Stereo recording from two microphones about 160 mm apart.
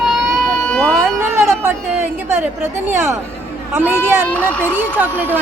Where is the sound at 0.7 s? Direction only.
5° left (ahead or behind).